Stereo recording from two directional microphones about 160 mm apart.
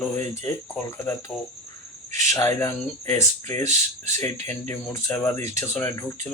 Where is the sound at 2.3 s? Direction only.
15° left (ahead or behind).